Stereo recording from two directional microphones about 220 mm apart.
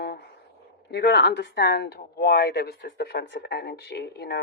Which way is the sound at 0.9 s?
50° left (ahead or behind).